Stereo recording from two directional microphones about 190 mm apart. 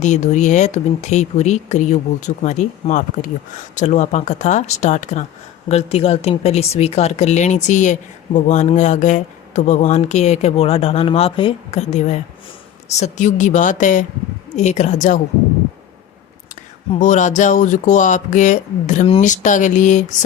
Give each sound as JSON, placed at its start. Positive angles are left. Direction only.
{"t": 0.0, "sound": "speech", "side_deg": 40}
{"t": 16.9, "sound": "speech", "side_deg": 40}